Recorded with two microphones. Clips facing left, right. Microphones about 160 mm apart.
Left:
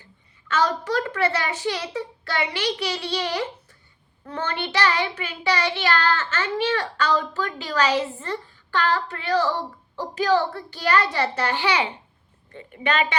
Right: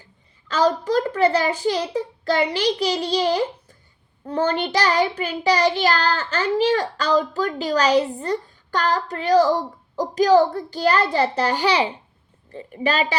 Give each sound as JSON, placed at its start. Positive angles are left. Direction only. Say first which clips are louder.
{"t": 0.4, "sound": "child singing", "louder": "right 4 dB", "side_deg": -35}